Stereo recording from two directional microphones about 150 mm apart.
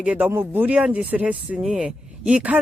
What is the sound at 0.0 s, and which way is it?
Speech, 10° right (ahead or behind).